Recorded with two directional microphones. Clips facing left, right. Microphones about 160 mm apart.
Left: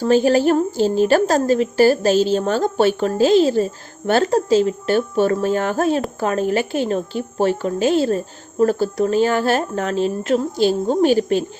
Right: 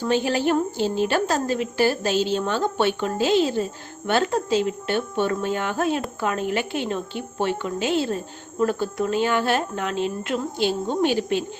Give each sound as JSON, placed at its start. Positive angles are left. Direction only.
{"t": 0.0, "sound": "a woman's voice", "side_deg": 40}